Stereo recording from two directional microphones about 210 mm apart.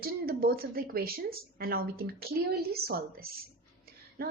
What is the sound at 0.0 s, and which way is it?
A woman's voice, 45° right (ahead or behind).